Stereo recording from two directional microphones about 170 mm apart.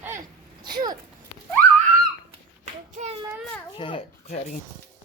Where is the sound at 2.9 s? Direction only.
40° right (ahead or behind).